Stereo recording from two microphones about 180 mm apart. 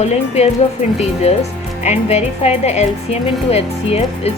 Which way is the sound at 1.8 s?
40° left (ahead or behind).